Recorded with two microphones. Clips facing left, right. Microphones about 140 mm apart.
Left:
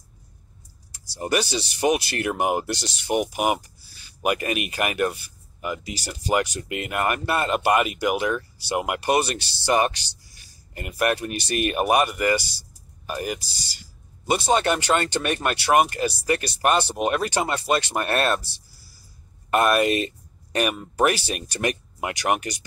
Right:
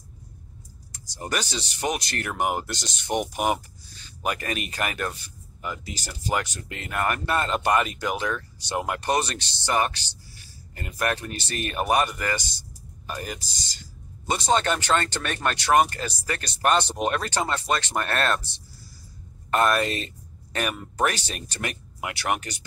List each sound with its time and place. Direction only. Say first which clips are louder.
1.1 s speech: left 6 dB; 10° left (ahead or behind)
19.5 s speech: left 3 dB; 15° left (ahead or behind)